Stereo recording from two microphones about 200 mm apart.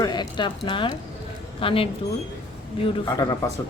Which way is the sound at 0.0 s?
20° left (ahead or behind).